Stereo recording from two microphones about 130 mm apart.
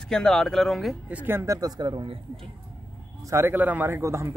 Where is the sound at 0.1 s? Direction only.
5° left (ahead or behind).